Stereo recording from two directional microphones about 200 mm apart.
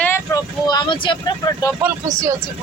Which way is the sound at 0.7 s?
20° left (ahead or behind).